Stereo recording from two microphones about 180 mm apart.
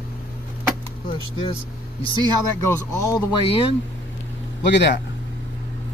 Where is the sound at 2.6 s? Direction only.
15° left (ahead or behind).